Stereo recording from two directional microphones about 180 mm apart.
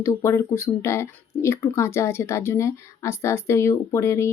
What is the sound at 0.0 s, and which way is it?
Speech, 15° left (ahead or behind).